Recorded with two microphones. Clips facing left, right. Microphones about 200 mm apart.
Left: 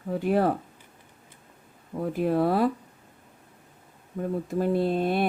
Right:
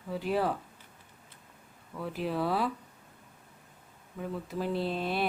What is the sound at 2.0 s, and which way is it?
Speech, 50° left (ahead or behind).